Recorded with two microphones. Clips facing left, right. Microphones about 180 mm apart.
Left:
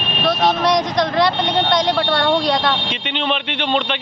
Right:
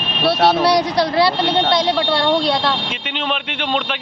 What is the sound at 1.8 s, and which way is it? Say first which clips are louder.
Speech: even; 5° right (ahead or behind).